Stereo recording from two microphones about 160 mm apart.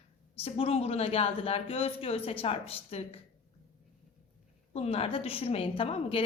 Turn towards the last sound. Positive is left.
turn(degrees=35)  # may be behind; listen again after turning